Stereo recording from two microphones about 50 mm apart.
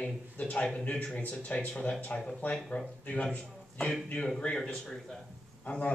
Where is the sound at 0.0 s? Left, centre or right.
Left.